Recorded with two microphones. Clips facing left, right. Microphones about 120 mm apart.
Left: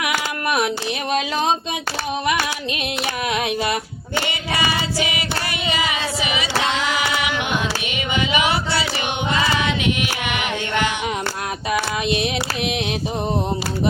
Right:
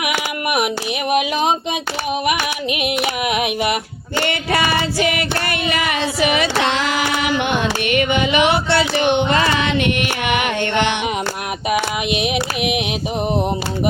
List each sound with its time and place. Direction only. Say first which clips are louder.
0.0 s a sound: right 1 dB; 20° right (ahead or behind)
1.1 s female singing: right 3 dB; 20° right (ahead or behind)
4.2 s female singing: right 5 dB; 60° right (ahead or behind)
7.9 s a sound: right 6 dB; 60° right (ahead or behind)
9.3 s mantra: right 4 dB; 60° right (ahead or behind)
11.7 s female singing: right 2 dB; 20° right (ahead or behind)